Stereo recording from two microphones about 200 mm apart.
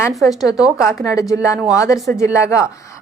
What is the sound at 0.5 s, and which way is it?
Speech, centre (ahead or behind).